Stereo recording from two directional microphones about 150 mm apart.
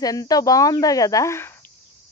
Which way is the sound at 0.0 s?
25° left (ahead or behind).